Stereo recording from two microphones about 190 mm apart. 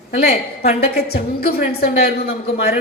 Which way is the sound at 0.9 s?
55° left (ahead or behind).